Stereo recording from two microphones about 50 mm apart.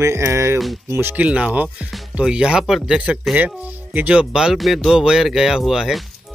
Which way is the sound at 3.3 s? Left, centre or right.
Right.